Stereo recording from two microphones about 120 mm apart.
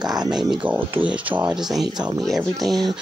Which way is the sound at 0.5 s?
10° right (ahead or behind).